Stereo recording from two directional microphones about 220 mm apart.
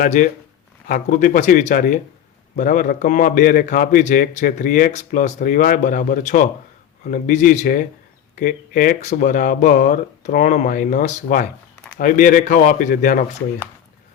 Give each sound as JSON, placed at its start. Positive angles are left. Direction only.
{"t": 0.0, "sound": "a man's voice", "side_deg": 35}